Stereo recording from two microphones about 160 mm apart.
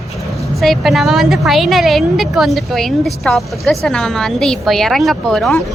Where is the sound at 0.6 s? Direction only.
Centre (ahead or behind).